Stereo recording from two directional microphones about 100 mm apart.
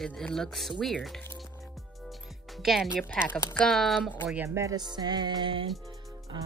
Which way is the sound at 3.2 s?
5° left (ahead or behind).